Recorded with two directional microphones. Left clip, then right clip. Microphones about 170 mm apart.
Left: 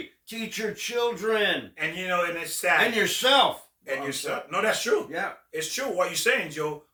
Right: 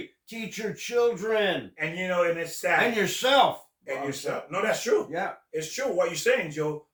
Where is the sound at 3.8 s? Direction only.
20° left (ahead or behind).